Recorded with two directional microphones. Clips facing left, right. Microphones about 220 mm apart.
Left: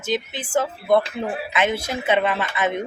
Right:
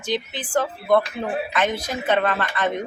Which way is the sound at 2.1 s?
10° left (ahead or behind).